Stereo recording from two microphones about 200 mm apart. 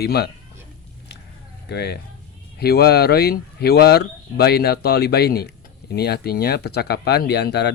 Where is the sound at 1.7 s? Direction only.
55° left (ahead or behind).